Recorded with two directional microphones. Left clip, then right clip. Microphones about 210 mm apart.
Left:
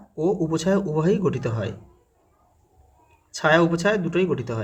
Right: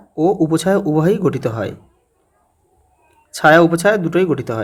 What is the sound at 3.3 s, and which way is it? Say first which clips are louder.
Speech: right 8 dB; 30° right (ahead or behind).